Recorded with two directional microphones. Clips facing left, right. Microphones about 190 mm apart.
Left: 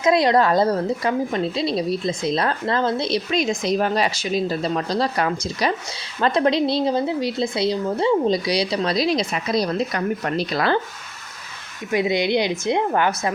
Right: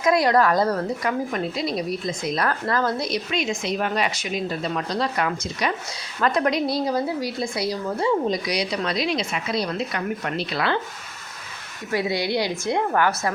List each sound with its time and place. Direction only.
0.0 s speech: 25° left (ahead or behind)
3.3 s speech: 40° left (ahead or behind)
11.9 s speech: 20° left (ahead or behind)